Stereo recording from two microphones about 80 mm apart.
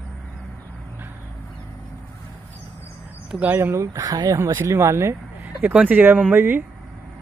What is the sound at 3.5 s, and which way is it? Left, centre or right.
Speech, right.